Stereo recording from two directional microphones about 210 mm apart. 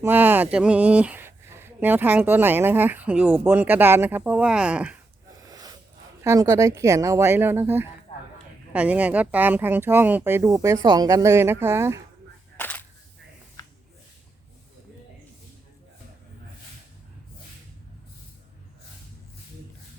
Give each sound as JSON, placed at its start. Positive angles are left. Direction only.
{"t": 0.0, "sound": "speech", "side_deg": -10}
{"t": 5.5, "sound": "a sound", "side_deg": -20}
{"t": 6.2, "sound": "speech", "side_deg": -15}
{"t": 12.5, "sound": "single-lens reflex camera", "side_deg": 10}